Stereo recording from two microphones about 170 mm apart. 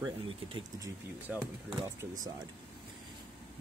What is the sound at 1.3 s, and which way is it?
Speech, 10° right (ahead or behind).